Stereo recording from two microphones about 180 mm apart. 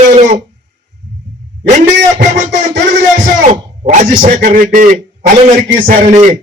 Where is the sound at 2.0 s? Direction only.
45° right (ahead or behind).